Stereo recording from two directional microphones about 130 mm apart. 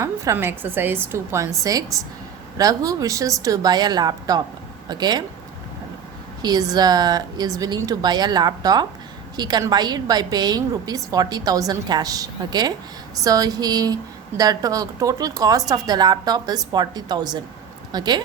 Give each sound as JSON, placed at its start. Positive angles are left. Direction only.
{"t": 0.0, "sound": "a woman's voice", "side_deg": -20}
{"t": 6.4, "sound": "a woman's voice", "side_deg": -30}